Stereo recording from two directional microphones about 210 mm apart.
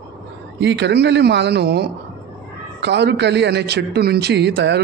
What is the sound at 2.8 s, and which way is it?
A man's voice, 55° right (ahead or behind).